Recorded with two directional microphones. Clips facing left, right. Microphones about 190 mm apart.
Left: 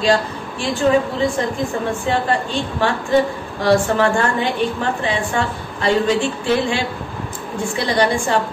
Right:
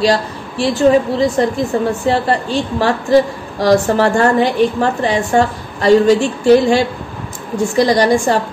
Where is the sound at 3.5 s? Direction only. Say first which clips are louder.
Right 4 dB; 40° right (ahead or behind).